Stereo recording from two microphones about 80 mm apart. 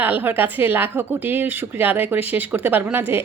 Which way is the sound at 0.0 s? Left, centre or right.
Right.